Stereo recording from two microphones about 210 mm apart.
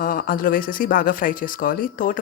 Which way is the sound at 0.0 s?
40° left (ahead or behind).